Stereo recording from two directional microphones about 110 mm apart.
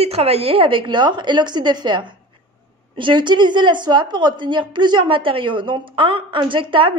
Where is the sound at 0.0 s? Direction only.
70° right (ahead or behind).